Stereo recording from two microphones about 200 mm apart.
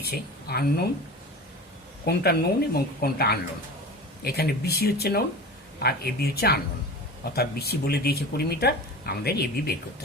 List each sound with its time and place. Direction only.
0.0 s a woman's voice: 50° left (ahead or behind)
2.0 s speech: 50° left (ahead or behind)